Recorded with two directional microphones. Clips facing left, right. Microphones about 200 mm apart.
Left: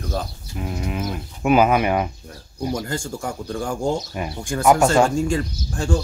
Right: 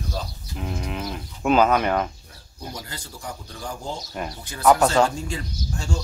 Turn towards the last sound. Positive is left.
turn(degrees=50)  # may be behind; listen again after turning